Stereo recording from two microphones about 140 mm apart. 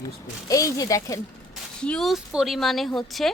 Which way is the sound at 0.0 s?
25° left (ahead or behind).